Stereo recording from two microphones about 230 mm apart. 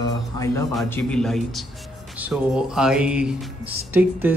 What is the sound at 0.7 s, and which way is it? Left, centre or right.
Music, centre.